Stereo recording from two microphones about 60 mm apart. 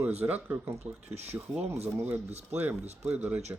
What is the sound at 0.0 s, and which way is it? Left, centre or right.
Speech, right.